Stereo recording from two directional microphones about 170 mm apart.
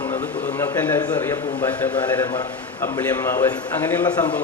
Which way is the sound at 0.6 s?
15° left (ahead or behind).